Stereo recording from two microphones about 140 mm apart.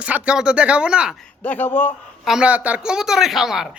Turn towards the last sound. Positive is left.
turn(degrees=-5)  # may be behind; listen again after turning